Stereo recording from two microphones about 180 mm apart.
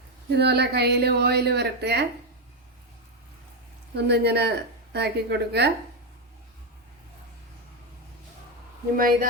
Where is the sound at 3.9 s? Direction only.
70° right (ahead or behind).